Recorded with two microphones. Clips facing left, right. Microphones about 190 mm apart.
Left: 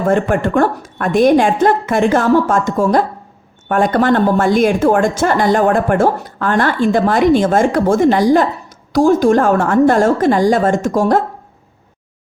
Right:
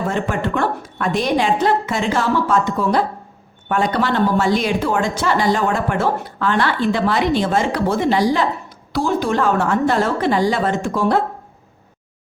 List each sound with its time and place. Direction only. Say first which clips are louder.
0.0 s a woman's voice: left 7 dB; 50° left (ahead or behind)